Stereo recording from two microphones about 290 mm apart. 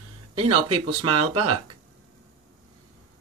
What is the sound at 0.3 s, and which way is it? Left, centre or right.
Speech, centre.